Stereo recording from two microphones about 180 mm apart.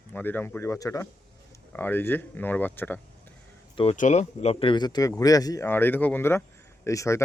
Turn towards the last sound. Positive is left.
turn(degrees=15)  # may be behind; listen again after turning